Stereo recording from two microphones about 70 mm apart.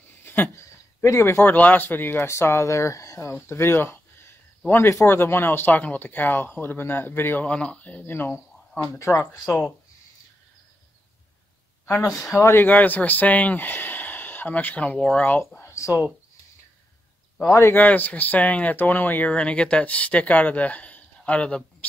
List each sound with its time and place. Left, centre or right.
0.2 s a sound: left
1.5 s speech: left
7.4 s speech: centre; by 8.8 s left
9.1 s speech: centre
11.8 s a sound: left
12.4 s speech: left
12.6 s speech: left
15.0 s speech: centre
15.2 s speech: left
15.6 s a sound: left
17.5 s speech: left
17.7 s speech: left
19.3 s speech: centre